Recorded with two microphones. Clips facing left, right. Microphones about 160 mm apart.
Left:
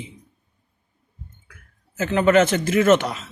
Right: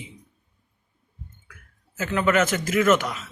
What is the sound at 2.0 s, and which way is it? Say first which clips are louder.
A man's voice: left 5 dB; 30° left (ahead or behind).